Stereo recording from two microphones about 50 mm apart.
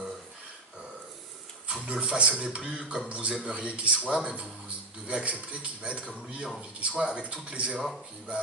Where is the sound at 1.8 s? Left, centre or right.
Centre.